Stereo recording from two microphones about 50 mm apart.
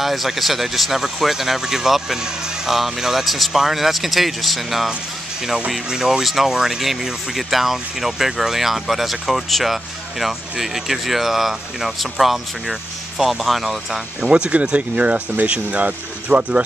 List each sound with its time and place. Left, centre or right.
0.0 s speech: centre
14.2 s speech: centre